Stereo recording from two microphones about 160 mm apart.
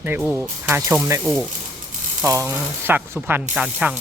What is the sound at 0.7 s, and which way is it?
Speech, 15° right (ahead or behind).